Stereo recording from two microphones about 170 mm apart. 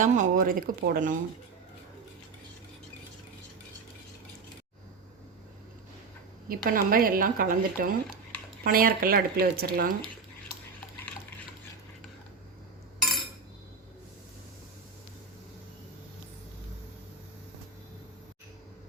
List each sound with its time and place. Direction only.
0.0 s speech: 50° right (ahead or behind)
6.5 s speech: 55° right (ahead or behind)